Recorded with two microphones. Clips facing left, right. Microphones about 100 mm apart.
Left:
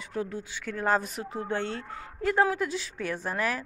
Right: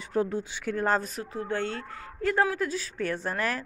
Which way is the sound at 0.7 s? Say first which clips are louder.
Even; 5° left (ahead or behind).